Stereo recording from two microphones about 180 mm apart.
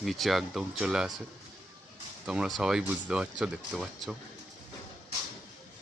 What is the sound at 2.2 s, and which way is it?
Speech, 5° right (ahead or behind).